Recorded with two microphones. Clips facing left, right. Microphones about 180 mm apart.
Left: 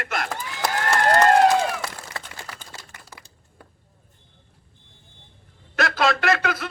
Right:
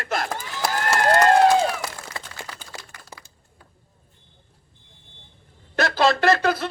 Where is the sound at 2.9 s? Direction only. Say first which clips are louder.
Right 2 dB; 25° left (ahead or behind).